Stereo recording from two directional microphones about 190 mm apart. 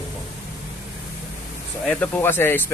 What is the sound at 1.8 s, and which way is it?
Speech, 10° left (ahead or behind).